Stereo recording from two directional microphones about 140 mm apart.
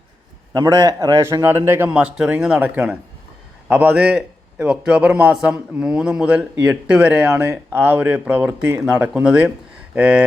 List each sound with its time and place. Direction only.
0.5 s a man's voice: 30° right (ahead or behind); by 10.2 s 10° right (ahead or behind)